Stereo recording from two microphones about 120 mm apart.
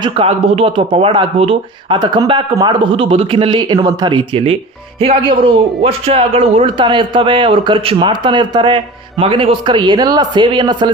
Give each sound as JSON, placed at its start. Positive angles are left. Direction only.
{"t": 0.0, "sound": "speech", "side_deg": -55}
{"t": 2.0, "sound": "a man's voice", "side_deg": -35}
{"t": 6.7, "sound": "a man's voice", "side_deg": -40}